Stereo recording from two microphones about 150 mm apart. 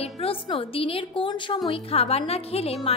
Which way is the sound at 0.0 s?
40° left (ahead or behind).